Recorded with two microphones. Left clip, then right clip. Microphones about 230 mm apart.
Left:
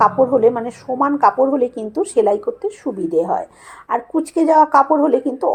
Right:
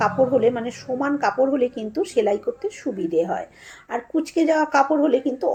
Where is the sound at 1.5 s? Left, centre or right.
Centre.